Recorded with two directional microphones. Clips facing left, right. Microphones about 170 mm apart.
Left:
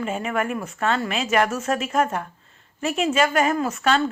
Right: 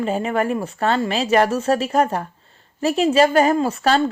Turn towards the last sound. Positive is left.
turn(degrees=-35)  # may be behind; listen again after turning